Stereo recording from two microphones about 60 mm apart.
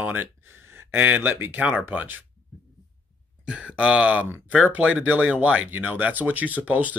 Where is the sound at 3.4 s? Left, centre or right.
Centre.